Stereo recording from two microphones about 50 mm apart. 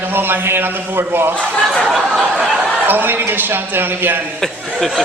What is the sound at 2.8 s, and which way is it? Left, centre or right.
A man's voice, right.